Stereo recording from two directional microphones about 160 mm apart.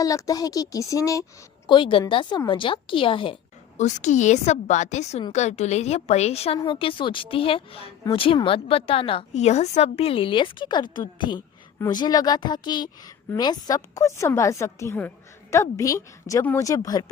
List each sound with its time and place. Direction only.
0.0 s a woman's voice: 20° left (ahead or behind)
1.6 s a woman's voice: 30° left (ahead or behind)
3.8 s a woman's voice: 50° left (ahead or behind); by 17.1 s 25° left (ahead or behind)